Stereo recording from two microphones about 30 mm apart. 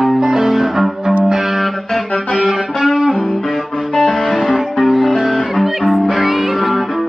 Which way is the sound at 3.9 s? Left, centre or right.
Centre.